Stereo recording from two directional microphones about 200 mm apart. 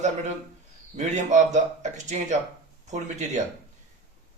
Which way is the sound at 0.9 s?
35° right (ahead or behind).